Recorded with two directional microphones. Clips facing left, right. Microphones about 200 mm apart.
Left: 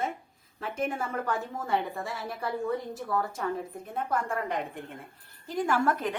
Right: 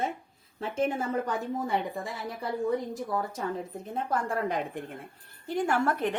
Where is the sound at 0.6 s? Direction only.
25° right (ahead or behind).